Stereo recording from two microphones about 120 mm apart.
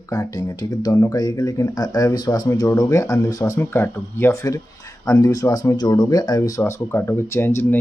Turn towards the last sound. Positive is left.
turn(degrees=20)  # may be behind; listen again after turning